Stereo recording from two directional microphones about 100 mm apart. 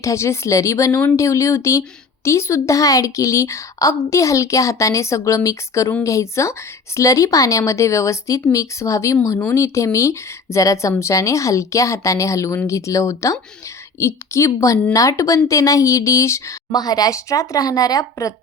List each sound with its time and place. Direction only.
0.0 s a woman's voice: 30° left (ahead or behind)
16.7 s a woman's voice: 40° left (ahead or behind)